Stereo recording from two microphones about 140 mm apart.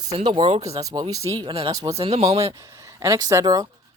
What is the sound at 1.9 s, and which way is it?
Speech, 45° right (ahead or behind).